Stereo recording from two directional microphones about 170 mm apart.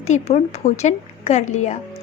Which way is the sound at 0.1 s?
45° left (ahead or behind).